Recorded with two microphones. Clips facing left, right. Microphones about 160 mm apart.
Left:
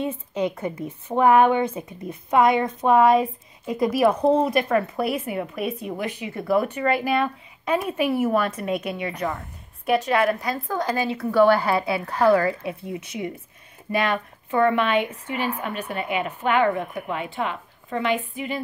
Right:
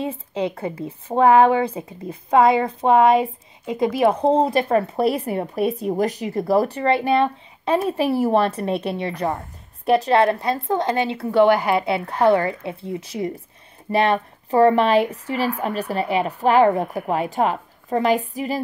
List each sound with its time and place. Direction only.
0.0 s a woman's voice: 30° right (ahead or behind)